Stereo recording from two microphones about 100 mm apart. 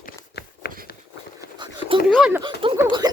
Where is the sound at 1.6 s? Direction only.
60° right (ahead or behind).